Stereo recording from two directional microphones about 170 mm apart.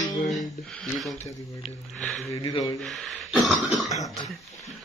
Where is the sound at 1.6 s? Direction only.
Centre (ahead or behind).